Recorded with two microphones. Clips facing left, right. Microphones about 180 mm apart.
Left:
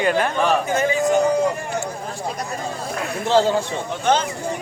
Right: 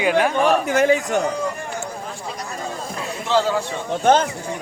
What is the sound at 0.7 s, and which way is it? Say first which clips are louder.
Speech: right 1 dB; 75° right (ahead or behind).